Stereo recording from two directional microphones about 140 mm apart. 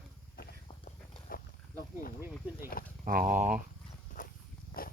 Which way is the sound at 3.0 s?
80° right.